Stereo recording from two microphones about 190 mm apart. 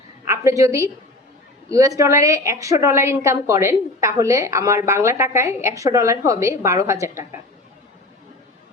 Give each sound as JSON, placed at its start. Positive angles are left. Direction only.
{"t": 0.3, "sound": "a woman's voice", "side_deg": -15}